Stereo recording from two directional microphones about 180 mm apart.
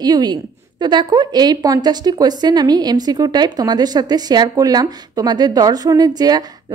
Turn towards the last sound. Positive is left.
turn(degrees=-20)  # may be behind; listen again after turning